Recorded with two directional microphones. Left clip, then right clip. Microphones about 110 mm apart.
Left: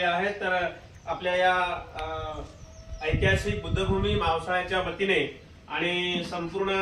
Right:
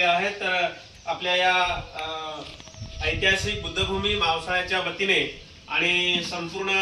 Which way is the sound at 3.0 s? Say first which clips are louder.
Right 3 dB; 5° left (ahead or behind).